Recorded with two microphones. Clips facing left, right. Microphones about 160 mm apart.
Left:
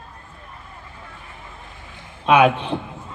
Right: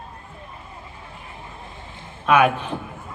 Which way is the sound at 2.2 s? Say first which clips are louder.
Left 2 dB; 20° left (ahead or behind).